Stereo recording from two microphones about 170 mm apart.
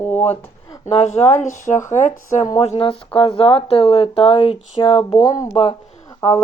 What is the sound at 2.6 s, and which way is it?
Speech, 35° left (ahead or behind).